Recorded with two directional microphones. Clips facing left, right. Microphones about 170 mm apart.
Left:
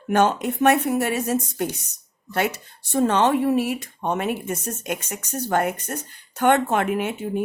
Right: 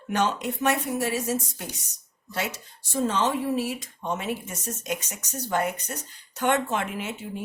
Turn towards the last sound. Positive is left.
turn(degrees=60)  # may be behind; listen again after turning